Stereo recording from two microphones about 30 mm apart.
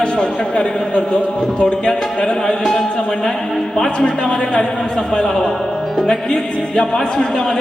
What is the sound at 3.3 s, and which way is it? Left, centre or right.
Speech, centre.